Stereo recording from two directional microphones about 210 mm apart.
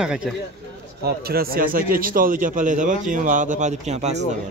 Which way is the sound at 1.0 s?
45° right (ahead or behind).